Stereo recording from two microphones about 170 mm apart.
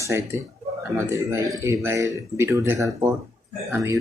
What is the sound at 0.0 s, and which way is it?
Speech, 20° right (ahead or behind).